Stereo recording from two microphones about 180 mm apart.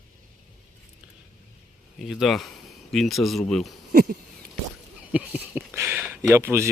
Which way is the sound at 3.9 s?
50° right (ahead or behind).